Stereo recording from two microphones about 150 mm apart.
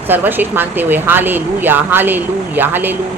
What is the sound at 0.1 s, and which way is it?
Speech, 15° right (ahead or behind).